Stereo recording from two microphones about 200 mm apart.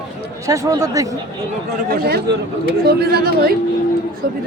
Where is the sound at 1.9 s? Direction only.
50° right (ahead or behind).